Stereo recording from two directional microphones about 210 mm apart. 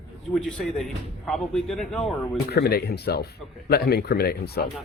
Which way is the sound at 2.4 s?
50° left (ahead or behind).